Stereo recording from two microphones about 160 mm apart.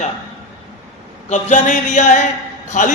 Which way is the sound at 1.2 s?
50° left (ahead or behind).